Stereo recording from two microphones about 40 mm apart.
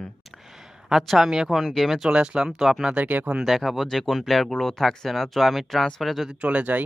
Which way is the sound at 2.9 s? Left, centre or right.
Right.